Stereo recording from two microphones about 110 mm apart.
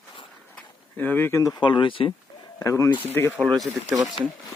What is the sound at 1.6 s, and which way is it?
Speech, 45° left (ahead or behind).